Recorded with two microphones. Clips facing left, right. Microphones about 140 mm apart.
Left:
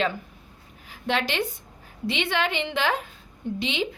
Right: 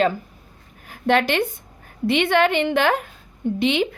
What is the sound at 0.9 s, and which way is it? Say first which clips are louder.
A woman's voice: right 8 dB; 55° right (ahead or behind).